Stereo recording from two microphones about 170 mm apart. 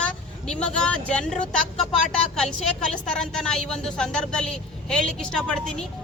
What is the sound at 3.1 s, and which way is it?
A woman's voice, 5° left (ahead or behind).